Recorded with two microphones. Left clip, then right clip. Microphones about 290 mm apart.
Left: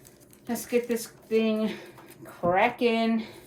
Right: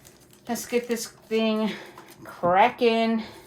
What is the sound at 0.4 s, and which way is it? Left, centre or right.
Speech, right.